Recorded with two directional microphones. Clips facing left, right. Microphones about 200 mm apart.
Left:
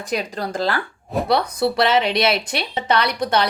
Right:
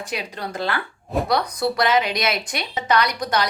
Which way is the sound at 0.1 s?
40° left (ahead or behind).